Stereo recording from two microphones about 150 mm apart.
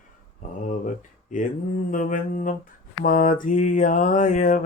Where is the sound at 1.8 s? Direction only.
60° left (ahead or behind).